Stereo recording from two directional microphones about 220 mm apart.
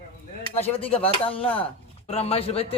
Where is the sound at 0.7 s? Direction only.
25° left (ahead or behind).